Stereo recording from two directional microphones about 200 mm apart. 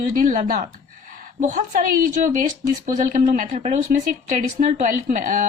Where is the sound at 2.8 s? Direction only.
40° right (ahead or behind).